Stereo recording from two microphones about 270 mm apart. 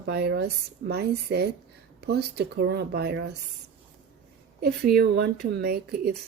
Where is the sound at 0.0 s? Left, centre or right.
Right.